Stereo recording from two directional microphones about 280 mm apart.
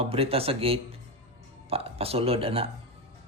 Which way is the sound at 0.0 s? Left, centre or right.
Right.